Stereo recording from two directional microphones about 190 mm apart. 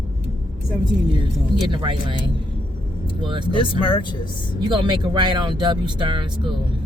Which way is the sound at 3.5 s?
25° left (ahead or behind).